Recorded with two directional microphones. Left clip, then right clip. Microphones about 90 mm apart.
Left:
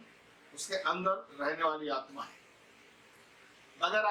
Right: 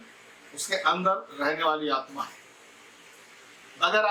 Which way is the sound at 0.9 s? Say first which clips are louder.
Right 8 dB; 45° right (ahead or behind).